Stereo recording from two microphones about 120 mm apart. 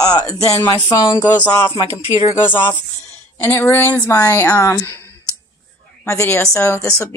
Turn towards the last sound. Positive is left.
turn(degrees=25)  # may be behind; listen again after turning